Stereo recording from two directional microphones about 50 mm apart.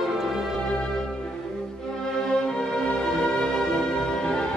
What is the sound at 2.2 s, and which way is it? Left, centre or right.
Music, centre.